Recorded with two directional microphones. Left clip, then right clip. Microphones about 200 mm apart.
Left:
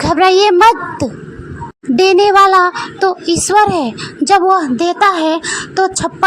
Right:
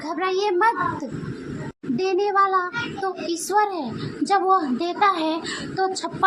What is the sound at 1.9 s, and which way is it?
A child's voice, 40° left (ahead or behind).